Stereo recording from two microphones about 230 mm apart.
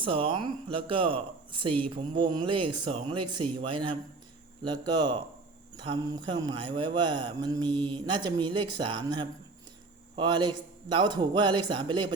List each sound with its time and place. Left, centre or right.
0.0 s speech: right